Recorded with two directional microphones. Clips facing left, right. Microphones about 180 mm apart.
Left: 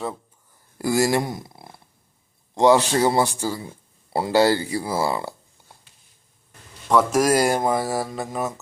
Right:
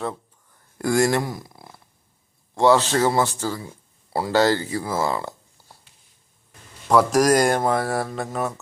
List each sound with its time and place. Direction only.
0.8 s speech: 5° left (ahead or behind)
1.2 s speech: 20° left (ahead or behind)
4.1 s speech: 25° left (ahead or behind)
4.4 s speech: 10° left (ahead or behind)
6.8 s speech: centre (ahead or behind)